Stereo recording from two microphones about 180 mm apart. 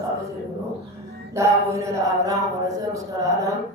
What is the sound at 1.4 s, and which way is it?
Mantra, 15° right (ahead or behind).